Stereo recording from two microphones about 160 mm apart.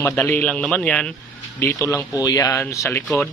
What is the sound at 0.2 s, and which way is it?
Speech, 10° left (ahead or behind).